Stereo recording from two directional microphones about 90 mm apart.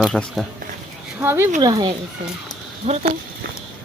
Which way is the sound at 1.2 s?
30° right (ahead or behind).